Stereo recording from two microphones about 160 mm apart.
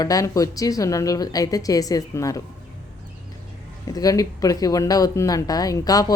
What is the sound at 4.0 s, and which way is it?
A woman's voice, 20° left (ahead or behind).